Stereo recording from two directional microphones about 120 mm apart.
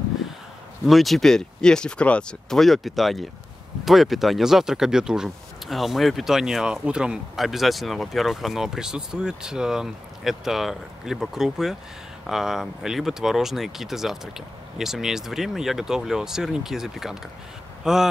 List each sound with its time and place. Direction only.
0.8 s speech: centre (ahead or behind)